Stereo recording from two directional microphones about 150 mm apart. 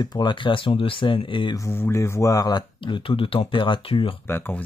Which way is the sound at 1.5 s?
20° left (ahead or behind).